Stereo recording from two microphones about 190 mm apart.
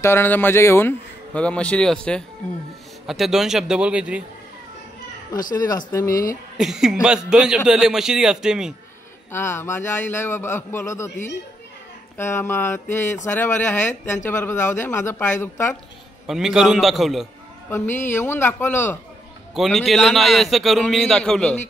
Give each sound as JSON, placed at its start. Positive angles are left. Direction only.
{"t": 0.0, "sound": "a man's voice", "side_deg": 10}
{"t": 5.3, "sound": "speech", "side_deg": 20}
{"t": 6.6, "sound": "a man's voice", "side_deg": 0}
{"t": 9.3, "sound": "speech", "side_deg": 10}
{"t": 12.2, "sound": "speech", "side_deg": 15}
{"t": 16.3, "sound": "a man's voice", "side_deg": 0}
{"t": 17.6, "sound": "speech", "side_deg": 10}
{"t": 19.5, "sound": "a man's voice", "side_deg": 0}